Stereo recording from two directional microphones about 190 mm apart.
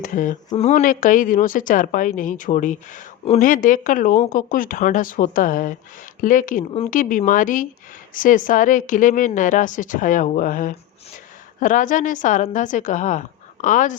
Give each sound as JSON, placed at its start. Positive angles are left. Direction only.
{"t": 0.0, "sound": "a woman's voice", "side_deg": 45}